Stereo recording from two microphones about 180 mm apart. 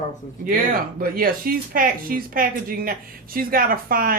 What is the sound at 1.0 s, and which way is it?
Speech, 55° right (ahead or behind).